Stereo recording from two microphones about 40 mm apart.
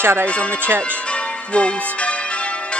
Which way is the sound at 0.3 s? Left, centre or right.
Left.